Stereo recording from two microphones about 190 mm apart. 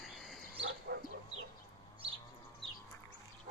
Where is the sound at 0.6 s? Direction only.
65° right (ahead or behind).